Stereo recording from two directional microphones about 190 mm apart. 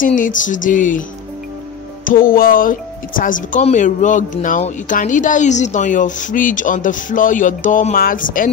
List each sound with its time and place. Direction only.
0.0 s speech: 45° left (ahead or behind)
2.0 s speech: 50° left (ahead or behind)